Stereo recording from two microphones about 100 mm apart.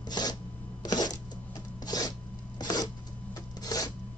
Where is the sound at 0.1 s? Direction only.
45° left (ahead or behind).